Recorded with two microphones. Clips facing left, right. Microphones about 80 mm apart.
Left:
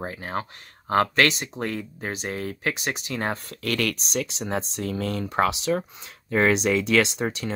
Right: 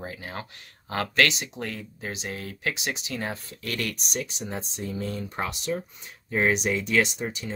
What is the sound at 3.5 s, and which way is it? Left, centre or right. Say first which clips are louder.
Speech: left 6 dB; left.